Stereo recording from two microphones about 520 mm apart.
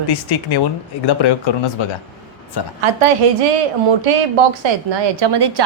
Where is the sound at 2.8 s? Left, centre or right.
Right.